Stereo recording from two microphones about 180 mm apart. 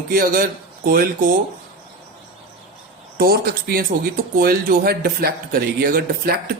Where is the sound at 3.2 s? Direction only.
55° right (ahead or behind).